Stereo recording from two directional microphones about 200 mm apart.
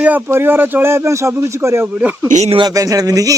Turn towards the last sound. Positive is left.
turn(degrees=-15)  # may be behind; listen again after turning